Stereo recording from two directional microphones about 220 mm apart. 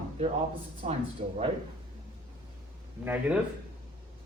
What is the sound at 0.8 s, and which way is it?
Speech, 30° right (ahead or behind).